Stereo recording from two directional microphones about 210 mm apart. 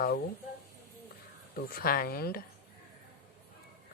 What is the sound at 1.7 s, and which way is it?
Speech, 45° left (ahead or behind).